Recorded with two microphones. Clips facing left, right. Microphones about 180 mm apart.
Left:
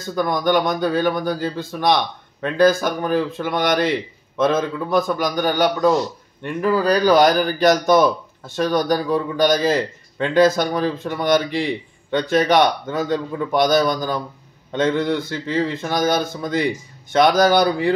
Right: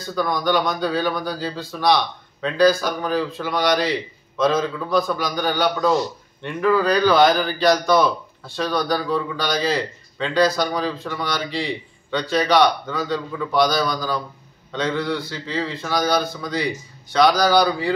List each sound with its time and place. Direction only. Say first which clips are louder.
0.0 s a man's voice: left 2 dB; 50° left (ahead or behind)